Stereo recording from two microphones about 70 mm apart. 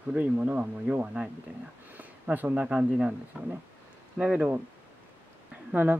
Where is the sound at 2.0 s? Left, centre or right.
Right.